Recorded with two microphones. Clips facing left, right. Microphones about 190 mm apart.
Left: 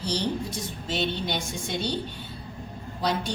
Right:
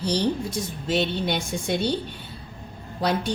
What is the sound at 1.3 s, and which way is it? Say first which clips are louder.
Speech: right 5 dB; 60° right (ahead or behind).